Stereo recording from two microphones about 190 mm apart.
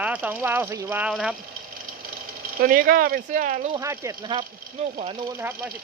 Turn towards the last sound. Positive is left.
turn(degrees=-10)  # may be behind; listen again after turning